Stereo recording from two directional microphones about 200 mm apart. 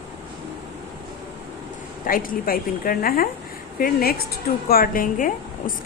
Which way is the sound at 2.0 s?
45° left (ahead or behind).